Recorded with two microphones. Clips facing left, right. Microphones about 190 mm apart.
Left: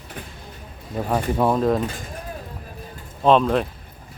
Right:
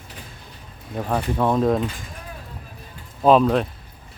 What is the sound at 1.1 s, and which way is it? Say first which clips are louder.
Speech: left 1 dB; 10° left (ahead or behind).